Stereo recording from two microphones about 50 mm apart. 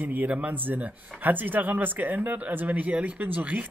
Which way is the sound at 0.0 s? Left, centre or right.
Right.